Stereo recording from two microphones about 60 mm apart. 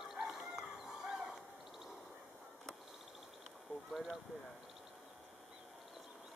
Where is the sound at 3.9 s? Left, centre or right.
Centre.